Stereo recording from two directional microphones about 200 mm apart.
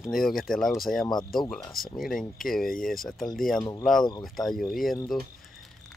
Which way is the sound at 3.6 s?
20° left (ahead or behind).